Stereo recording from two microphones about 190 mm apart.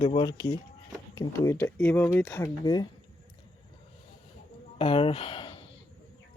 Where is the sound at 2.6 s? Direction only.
20° left (ahead or behind).